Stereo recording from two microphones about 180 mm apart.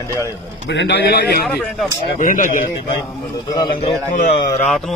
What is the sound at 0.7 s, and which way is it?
Speech, 75° left (ahead or behind).